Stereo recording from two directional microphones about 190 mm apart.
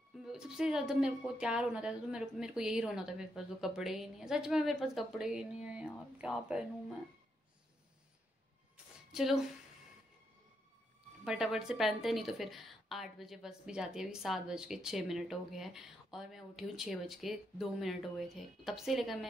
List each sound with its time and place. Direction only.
0.2 s speech: 5° right (ahead or behind)
9.1 s a woman's voice: centre (ahead or behind)
11.2 s speech: centre (ahead or behind)